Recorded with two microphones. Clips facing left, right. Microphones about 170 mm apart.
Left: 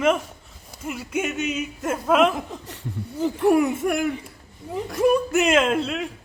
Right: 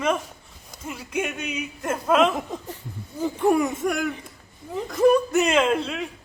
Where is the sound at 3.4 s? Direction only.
5° left (ahead or behind).